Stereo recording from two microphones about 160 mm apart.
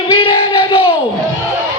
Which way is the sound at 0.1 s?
30° left (ahead or behind).